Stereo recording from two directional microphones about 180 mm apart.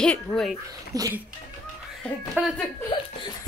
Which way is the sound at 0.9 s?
20° right (ahead or behind).